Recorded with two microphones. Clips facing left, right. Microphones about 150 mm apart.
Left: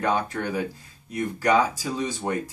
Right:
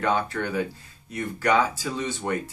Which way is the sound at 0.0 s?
15° left (ahead or behind).